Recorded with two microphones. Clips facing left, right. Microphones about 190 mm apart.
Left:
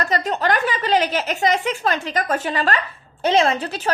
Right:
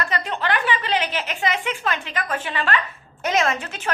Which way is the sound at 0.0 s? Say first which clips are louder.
Left 4 dB; 40° left (ahead or behind).